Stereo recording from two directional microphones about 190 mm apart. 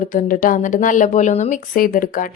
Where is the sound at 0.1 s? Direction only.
45° left (ahead or behind).